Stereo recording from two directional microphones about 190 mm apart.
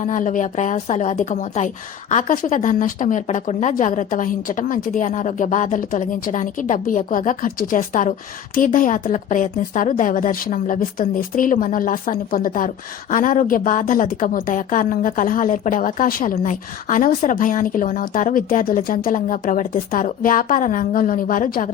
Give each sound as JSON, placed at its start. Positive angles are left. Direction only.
{"t": 0.0, "sound": "a woman's voice", "side_deg": 40}